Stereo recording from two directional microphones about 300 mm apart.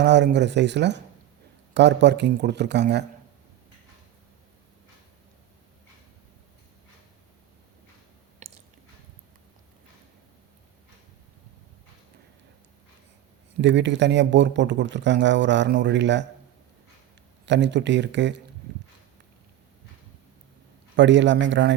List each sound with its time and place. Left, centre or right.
0.0 s speech: right
8.4 s a sound: right
13.6 s speech: right
17.4 s speech: right
20.9 s speech: right